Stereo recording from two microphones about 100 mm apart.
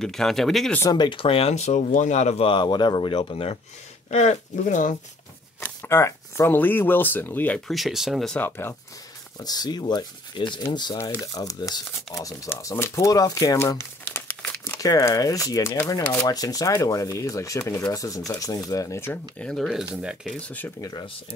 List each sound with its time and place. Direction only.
0.0 s speech: 5° left (ahead or behind)
0.8 s speech: 45° left (ahead or behind); by 2.5 s 90° left
2.5 s speech: 50° left (ahead or behind); by 3.5 s 65° left (ahead or behind)
5.6 s speech: 25° left (ahead or behind)
7.6 s speech: centre (ahead or behind)
8.5 s speech: 25° left (ahead or behind)
9.4 s speech: 40° left (ahead or behind); by 14.2 s 25° left (ahead or behind)
14.2 s crumpling: 15° left (ahead or behind)
14.8 s speech: 35° left (ahead or behind)
18.9 s speech: 20° left (ahead or behind)
19.4 s speech: centre (ahead or behind)
20.3 s speech: 15° left (ahead or behind)